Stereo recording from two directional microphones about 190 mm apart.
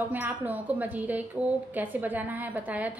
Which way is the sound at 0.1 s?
10° right (ahead or behind).